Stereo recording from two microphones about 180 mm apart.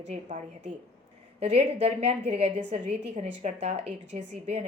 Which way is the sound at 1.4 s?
35° right (ahead or behind).